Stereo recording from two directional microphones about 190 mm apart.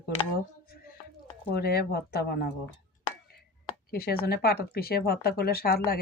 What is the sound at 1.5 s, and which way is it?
Speech, 55° left (ahead or behind).